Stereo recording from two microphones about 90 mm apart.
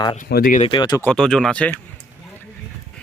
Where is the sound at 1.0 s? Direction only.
5° left (ahead or behind).